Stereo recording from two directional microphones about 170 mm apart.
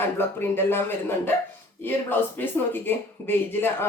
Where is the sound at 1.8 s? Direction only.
10° left (ahead or behind).